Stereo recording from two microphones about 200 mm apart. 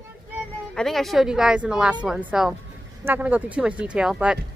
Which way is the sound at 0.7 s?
Centre (ahead or behind).